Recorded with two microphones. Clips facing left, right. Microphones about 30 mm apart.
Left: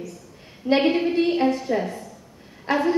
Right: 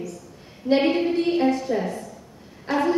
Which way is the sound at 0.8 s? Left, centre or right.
Centre.